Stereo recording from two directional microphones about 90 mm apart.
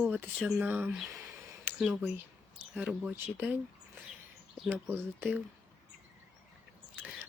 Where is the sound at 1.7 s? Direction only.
25° right (ahead or behind).